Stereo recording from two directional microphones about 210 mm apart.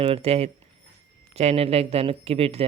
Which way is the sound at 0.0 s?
30° right (ahead or behind).